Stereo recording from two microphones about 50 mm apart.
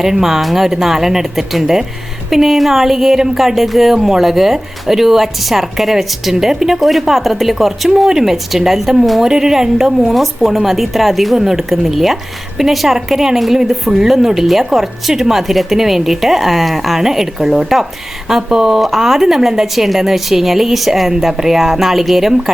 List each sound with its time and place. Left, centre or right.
0.0 s speech: centre